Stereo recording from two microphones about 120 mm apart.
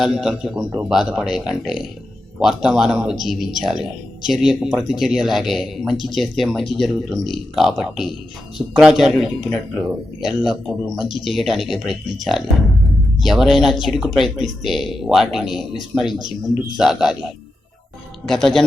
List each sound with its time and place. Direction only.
0.0 s speech: centre (ahead or behind)
18.3 s speech: 5° left (ahead or behind)